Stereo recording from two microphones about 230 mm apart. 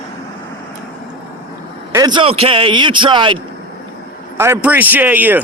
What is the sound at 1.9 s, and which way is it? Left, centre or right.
A man's voice, centre.